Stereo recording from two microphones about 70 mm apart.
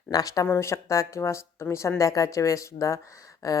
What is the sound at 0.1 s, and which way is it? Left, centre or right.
Speech, left.